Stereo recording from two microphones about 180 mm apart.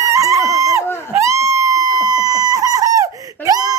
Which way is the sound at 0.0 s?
15° right (ahead or behind).